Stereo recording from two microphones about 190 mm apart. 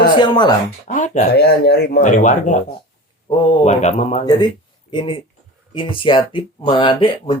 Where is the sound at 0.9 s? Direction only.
40° left (ahead or behind).